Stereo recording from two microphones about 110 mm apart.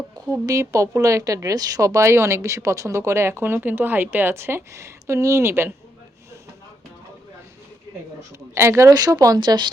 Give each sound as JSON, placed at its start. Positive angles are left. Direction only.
{"t": 0.3, "sound": "speech", "side_deg": -30}
{"t": 8.5, "sound": "speech", "side_deg": -25}